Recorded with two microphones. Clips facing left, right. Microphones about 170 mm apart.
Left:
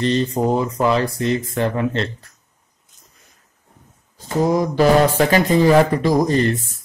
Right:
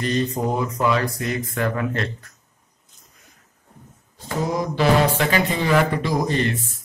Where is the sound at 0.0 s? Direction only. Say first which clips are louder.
Left 4 dB; 30° left (ahead or behind).